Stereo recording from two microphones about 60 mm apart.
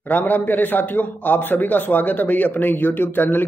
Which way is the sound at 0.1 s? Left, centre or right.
Left.